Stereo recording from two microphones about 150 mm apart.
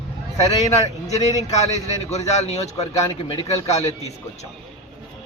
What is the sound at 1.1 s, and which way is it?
A man's voice, 45° left (ahead or behind).